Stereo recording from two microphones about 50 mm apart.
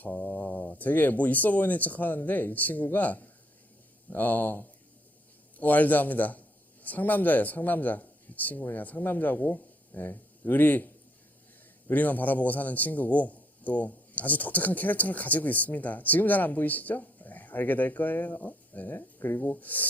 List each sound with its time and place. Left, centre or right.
0.3 s a man's voice: left
11.9 s a man's voice: left
18.9 s speech: left
19.4 s a man's voice: left